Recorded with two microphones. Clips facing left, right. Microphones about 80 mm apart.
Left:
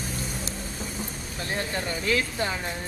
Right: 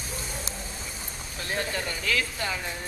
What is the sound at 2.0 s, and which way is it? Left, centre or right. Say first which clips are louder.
Speech: left 3 dB; left.